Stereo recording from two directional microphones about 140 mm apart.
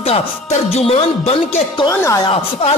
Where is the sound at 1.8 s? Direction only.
25° left (ahead or behind).